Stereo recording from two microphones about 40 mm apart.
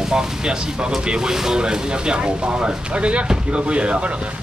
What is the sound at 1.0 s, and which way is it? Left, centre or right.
Speech, centre.